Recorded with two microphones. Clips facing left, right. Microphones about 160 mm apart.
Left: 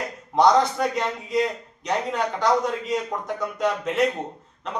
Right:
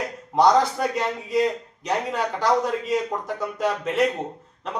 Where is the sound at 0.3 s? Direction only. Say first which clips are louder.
Even; 5° right (ahead or behind).